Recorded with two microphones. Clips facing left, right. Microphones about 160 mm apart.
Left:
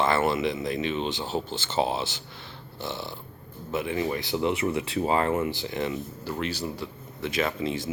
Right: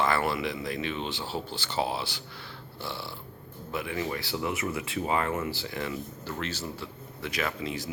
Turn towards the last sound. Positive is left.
turn(degrees=25)  # may be behind; listen again after turning